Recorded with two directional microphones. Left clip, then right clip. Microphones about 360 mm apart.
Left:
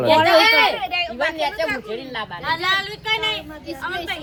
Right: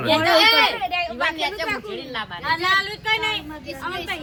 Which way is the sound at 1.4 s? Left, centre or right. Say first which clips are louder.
Left 2 dB; left.